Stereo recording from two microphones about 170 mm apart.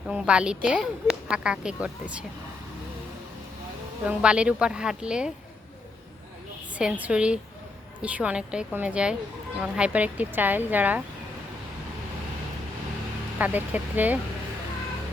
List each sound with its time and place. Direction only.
0.1 s speech: 5° right (ahead or behind)
4.0 s speech: 5° right (ahead or behind)
6.7 s speech: 10° right (ahead or behind)
13.4 s speech: 10° right (ahead or behind)